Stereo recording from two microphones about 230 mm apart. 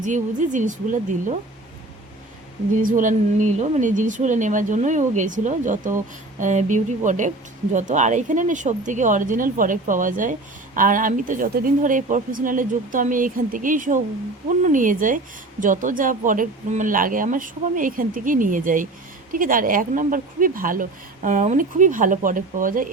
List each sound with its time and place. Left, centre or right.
0.0 s speech: right
2.7 s speech: right